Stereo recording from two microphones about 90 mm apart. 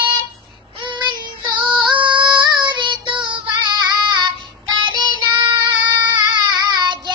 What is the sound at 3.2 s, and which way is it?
Female singing, 60° right (ahead or behind).